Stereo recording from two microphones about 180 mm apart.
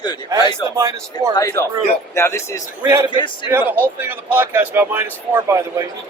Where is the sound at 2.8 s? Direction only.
15° right (ahead or behind).